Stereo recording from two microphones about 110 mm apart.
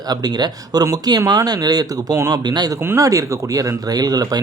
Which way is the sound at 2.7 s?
25° right (ahead or behind).